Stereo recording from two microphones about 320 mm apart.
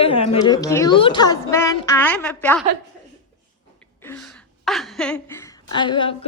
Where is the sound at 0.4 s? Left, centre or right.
Centre.